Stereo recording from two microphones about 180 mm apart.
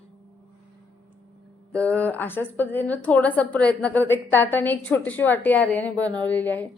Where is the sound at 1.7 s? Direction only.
5° left (ahead or behind).